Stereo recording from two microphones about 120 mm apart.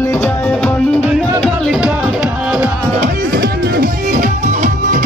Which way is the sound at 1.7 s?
10° right (ahead or behind).